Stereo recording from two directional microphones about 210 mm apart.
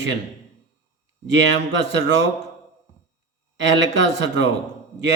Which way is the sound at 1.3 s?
60° right (ahead or behind).